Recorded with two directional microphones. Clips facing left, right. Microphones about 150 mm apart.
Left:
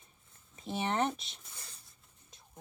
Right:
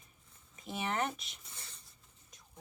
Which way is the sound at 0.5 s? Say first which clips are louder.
Left 3 dB; 30° left (ahead or behind).